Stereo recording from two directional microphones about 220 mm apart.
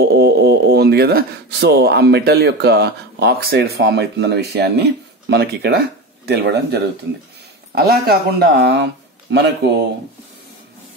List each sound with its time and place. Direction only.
0.0 s speech: 50° right (ahead or behind)